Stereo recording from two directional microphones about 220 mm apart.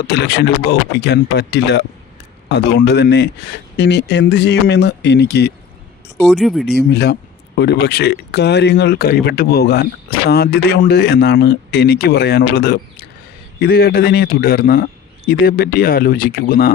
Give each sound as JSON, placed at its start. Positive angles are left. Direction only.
{"t": 0.1, "sound": "speech", "side_deg": 50}
{"t": 6.2, "sound": "speech", "side_deg": 0}
{"t": 6.7, "sound": "speech", "side_deg": 50}